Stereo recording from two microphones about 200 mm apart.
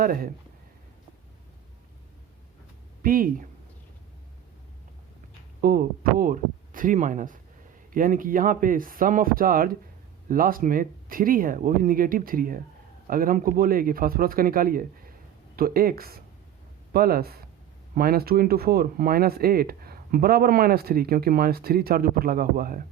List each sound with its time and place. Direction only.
0.0 s speech: 45° right (ahead or behind)
3.0 s speech: 45° right (ahead or behind)
5.5 s speech: 45° right (ahead or behind)